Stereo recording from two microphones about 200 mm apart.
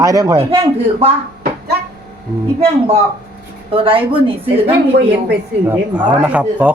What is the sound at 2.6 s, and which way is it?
Speech, 30° right (ahead or behind).